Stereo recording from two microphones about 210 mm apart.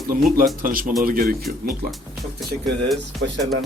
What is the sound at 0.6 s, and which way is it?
Speech, 40° right (ahead or behind).